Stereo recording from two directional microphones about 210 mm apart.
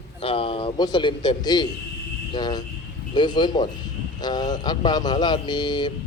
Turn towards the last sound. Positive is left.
turn(degrees=20)  # may be behind; listen again after turning